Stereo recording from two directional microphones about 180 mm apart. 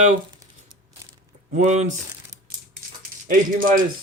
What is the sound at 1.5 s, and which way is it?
Speech, 40° right (ahead or behind).